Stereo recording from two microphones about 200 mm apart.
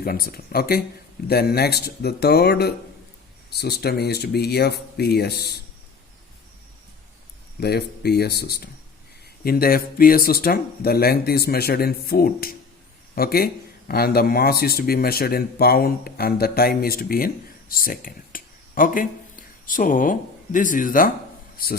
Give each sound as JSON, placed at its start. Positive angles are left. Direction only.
{"t": 0.0, "sound": "speech", "side_deg": 45}
{"t": 7.6, "sound": "speech", "side_deg": 55}